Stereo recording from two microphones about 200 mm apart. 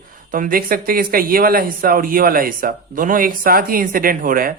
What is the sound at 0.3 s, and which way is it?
Speech, 40° right (ahead or behind).